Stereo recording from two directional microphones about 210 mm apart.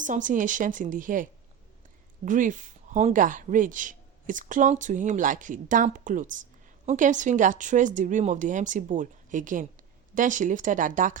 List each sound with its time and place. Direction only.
0.0 s speech: 35° right (ahead or behind)